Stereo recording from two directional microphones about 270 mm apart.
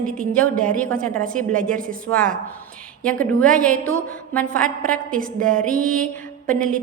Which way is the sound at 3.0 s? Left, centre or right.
Centre.